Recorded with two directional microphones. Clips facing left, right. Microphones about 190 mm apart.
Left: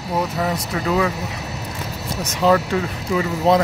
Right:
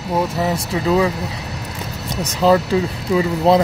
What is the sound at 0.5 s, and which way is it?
Speech, 25° right (ahead or behind).